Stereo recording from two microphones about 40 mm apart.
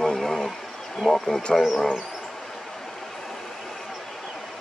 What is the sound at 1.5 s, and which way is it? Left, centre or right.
Speech, centre.